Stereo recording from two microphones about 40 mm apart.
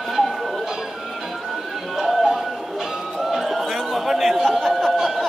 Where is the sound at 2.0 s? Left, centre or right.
Centre.